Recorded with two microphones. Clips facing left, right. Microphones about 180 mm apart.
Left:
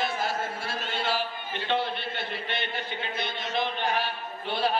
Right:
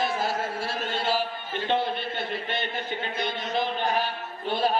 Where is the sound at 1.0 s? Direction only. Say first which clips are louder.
Right 2 dB; 45° right (ahead or behind).